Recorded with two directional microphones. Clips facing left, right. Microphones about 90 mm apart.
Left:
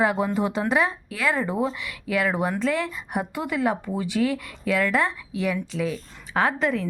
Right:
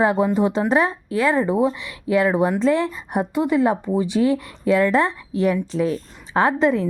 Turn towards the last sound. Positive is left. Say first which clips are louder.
# right 5 dB
turn(degrees=-25)  # may be behind; listen again after turning